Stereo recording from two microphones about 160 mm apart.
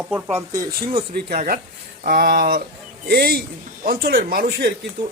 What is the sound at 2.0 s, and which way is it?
Speech, 65° right (ahead or behind).